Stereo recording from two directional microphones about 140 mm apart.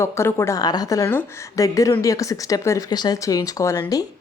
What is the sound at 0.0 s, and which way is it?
Speech, 20° left (ahead or behind).